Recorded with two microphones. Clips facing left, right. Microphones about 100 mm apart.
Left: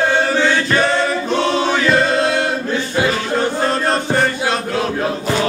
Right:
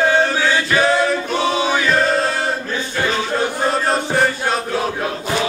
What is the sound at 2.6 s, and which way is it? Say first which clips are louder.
Music: left 4 dB; 10° left (ahead or behind).